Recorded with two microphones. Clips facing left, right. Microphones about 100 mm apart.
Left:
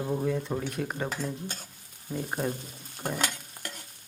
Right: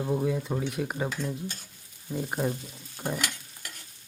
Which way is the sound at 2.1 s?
5° right (ahead or behind).